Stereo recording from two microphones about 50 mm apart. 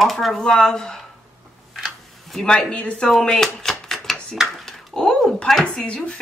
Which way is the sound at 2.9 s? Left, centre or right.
Centre.